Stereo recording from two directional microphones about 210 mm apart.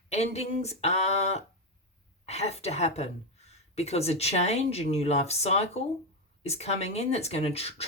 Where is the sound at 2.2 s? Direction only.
30° left (ahead or behind).